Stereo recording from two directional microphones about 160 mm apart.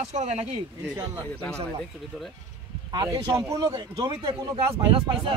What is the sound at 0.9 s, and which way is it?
Speech, 25° right (ahead or behind).